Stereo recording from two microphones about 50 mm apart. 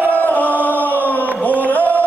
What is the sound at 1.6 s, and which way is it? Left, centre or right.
Music, left.